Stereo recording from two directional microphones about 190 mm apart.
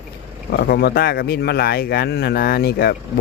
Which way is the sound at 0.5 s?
55° left (ahead or behind).